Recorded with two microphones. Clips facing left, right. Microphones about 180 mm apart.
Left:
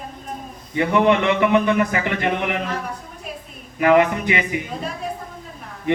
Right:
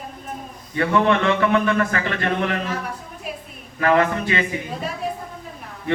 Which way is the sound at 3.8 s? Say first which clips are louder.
Left 3 dB; 15° left (ahead or behind).